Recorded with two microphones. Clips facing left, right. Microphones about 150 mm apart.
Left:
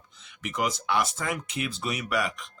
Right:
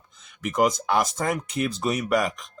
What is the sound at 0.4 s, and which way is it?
Speech, 45° right (ahead or behind).